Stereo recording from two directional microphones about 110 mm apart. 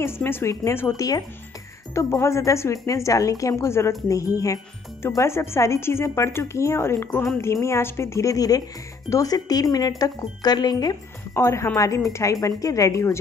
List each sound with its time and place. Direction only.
0.0 s speech: 20° left (ahead or behind)
5.0 s speech: 25° left (ahead or behind)
11.3 s speech: 25° left (ahead or behind)